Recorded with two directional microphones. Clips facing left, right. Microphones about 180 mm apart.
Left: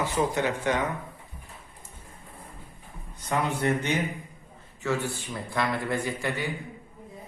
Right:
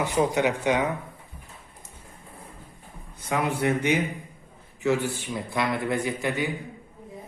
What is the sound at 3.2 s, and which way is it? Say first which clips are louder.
A man's voice: right 1 dB; 10° right (ahead or behind).